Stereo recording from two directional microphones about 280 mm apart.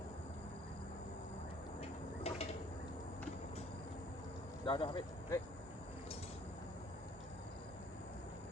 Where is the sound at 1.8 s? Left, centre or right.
Left.